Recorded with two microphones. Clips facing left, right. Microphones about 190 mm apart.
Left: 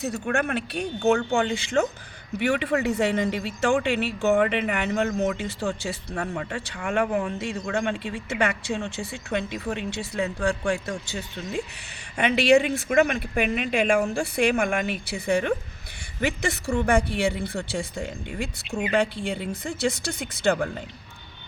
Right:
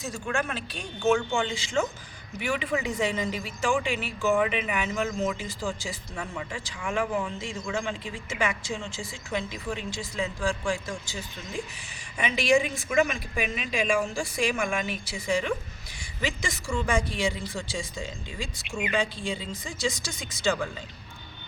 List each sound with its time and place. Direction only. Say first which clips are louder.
0.0 s speech: left 5 dB; 60° left (ahead or behind)